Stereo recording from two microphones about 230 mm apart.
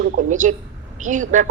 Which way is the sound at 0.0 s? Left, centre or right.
Right.